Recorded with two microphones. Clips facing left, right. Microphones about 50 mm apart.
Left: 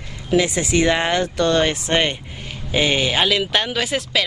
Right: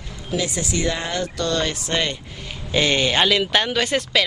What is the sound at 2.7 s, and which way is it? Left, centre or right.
Speech, centre.